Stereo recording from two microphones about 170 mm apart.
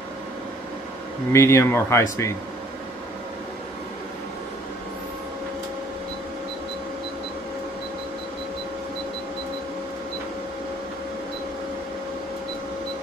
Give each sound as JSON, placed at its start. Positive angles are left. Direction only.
{"t": 1.3, "sound": "speech", "side_deg": 15}